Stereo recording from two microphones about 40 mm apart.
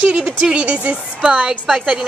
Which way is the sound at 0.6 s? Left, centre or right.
Right.